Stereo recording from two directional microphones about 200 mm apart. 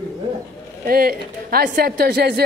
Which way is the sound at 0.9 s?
50° right (ahead or behind).